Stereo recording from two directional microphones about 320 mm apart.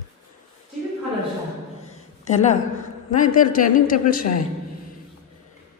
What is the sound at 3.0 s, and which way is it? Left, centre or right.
A man's voice, left.